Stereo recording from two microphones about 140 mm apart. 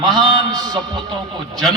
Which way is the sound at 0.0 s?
30° right (ahead or behind).